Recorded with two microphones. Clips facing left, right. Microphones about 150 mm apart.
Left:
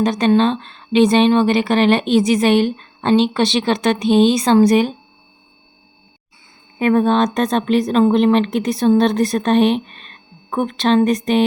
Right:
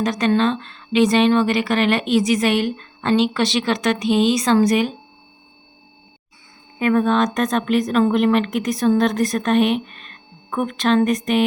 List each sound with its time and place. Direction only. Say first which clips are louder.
0.0 s a woman's voice: left 4 dB; 25° left (ahead or behind)
6.7 s speech: left 3 dB; 30° left (ahead or behind)